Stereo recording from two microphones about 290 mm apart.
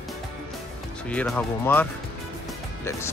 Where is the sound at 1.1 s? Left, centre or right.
Centre.